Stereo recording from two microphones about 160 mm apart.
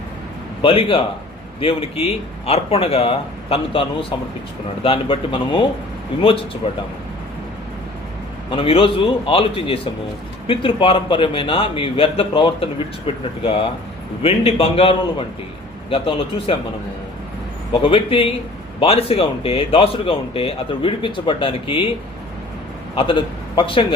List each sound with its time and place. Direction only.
0.6 s speech: 35° left (ahead or behind)
8.4 s speech: 35° left (ahead or behind)
17.7 s speech: 35° left (ahead or behind)
23.0 s speech: 35° left (ahead or behind)